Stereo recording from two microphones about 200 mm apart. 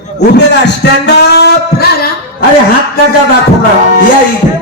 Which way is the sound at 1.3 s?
55° left (ahead or behind).